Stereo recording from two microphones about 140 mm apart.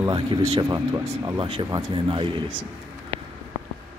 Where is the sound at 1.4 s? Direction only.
40° right (ahead or behind).